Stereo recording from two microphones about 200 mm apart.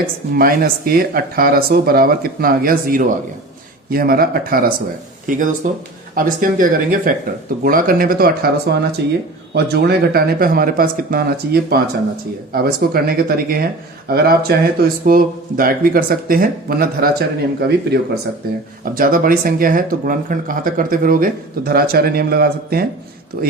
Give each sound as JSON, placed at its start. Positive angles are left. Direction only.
{"t": 0.3, "sound": "speech", "side_deg": -50}